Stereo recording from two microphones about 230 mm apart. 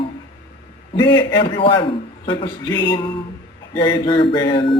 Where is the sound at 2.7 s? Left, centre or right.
Centre.